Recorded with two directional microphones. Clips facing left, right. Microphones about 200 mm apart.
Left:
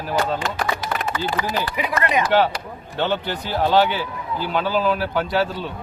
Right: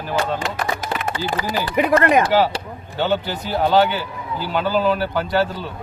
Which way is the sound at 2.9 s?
5° right (ahead or behind).